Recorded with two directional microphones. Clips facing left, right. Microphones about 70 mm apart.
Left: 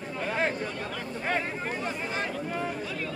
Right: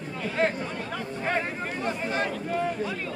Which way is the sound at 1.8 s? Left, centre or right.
Centre.